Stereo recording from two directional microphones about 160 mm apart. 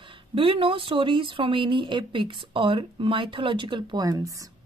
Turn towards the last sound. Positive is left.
turn(degrees=-20)  # may be behind; listen again after turning